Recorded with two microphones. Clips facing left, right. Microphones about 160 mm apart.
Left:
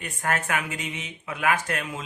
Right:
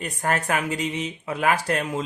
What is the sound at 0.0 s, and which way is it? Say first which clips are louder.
Speech: right 3 dB; 35° right (ahead or behind).